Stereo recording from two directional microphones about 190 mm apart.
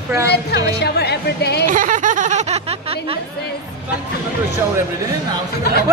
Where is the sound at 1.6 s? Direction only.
45° right (ahead or behind).